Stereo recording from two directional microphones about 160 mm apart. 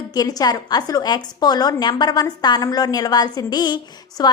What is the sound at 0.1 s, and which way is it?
A woman's voice, 25° left (ahead or behind).